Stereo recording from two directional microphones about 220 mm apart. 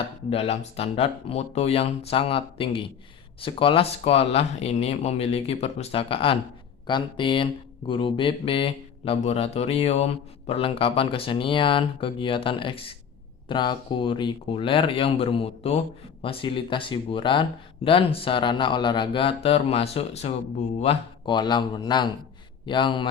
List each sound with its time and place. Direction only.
0.3 s speech: 25° left (ahead or behind)